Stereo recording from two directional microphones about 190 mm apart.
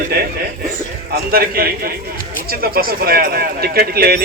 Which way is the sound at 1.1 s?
50° right (ahead or behind).